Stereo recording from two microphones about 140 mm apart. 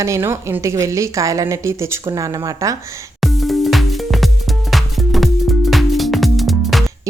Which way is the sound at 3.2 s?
Centre (ahead or behind).